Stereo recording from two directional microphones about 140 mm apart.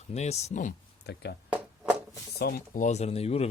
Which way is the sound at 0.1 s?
50° left (ahead or behind).